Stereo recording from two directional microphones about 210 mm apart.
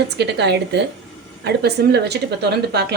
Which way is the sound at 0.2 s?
55° right (ahead or behind).